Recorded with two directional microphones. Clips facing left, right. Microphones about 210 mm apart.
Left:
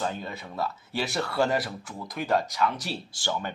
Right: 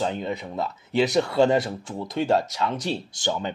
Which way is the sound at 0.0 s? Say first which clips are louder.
Right 5 dB; 20° right (ahead or behind).